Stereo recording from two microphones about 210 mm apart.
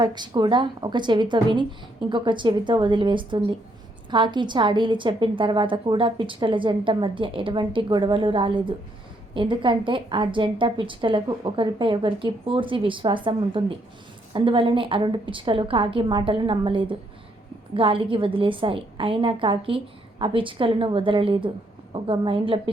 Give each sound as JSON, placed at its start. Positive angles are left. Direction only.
{"t": 0.0, "sound": "a woman's voice", "side_deg": -20}